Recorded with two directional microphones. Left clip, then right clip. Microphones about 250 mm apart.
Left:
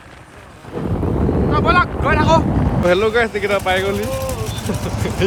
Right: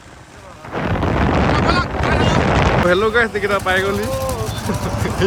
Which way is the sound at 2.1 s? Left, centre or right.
Centre.